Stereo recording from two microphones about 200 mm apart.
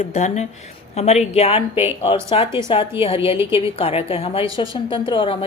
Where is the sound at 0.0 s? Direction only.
35° left (ahead or behind).